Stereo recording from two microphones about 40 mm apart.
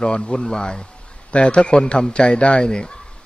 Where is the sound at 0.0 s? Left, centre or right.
Left.